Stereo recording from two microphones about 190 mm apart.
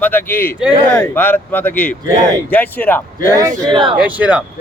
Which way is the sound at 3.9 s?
10° right (ahead or behind).